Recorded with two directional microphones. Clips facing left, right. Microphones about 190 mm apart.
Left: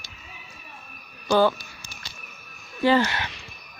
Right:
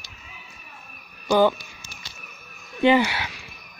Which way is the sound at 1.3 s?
15° right (ahead or behind).